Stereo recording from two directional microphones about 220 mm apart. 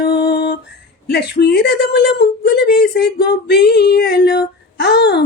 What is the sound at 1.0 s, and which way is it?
Speech, 50° left (ahead or behind).